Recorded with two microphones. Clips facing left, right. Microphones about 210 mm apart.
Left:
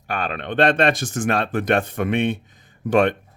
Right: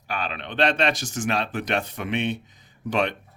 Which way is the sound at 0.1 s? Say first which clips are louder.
Left 5 dB; 50° left (ahead or behind).